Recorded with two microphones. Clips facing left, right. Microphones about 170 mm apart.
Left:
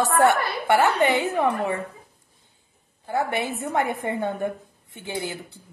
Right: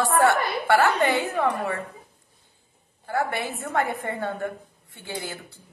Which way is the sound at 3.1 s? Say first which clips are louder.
Left 2 dB; 20° left (ahead or behind).